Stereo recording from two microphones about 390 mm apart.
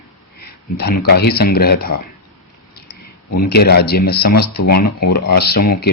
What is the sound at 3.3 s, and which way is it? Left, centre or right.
A man's voice, left.